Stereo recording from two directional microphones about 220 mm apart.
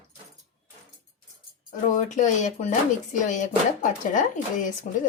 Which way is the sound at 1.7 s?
35° left (ahead or behind).